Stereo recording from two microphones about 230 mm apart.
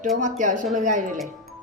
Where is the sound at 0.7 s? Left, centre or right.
Right.